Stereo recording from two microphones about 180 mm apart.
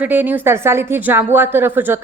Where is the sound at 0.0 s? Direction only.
10° right (ahead or behind).